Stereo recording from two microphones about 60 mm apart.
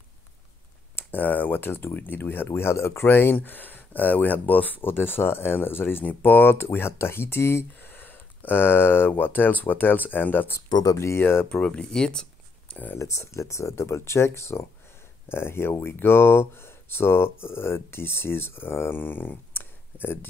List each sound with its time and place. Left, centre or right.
0.9 s speech: left
3.1 s speech: left
11.0 s speech: left
11.4 s speech: left
12.7 s speech: left
13.0 s speech: left